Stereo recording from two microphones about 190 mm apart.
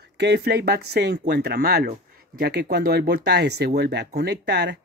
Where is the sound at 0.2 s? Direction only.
60° right (ahead or behind).